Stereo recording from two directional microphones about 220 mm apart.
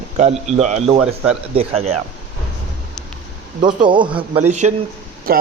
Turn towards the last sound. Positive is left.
turn(degrees=-40)  # may be behind; listen again after turning